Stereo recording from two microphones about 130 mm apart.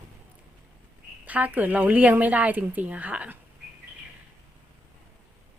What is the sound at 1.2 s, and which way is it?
Speech, 10° right (ahead or behind).